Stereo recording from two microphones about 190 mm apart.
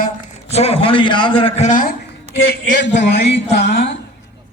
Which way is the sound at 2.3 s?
75° left (ahead or behind).